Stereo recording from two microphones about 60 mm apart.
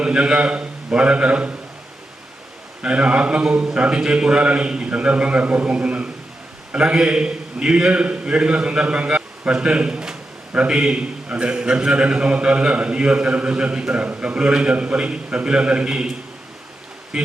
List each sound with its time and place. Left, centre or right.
0.0 s a man's voice: centre
2.8 s a man's voice: centre
17.1 s speech: centre